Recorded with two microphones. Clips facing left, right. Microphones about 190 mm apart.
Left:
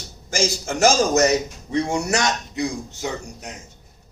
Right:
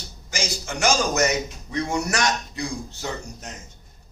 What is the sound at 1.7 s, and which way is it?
A man's voice, 25° left (ahead or behind).